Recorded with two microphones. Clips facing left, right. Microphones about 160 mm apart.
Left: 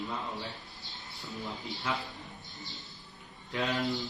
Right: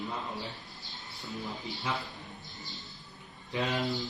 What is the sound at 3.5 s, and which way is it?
Speech, 20° right (ahead or behind).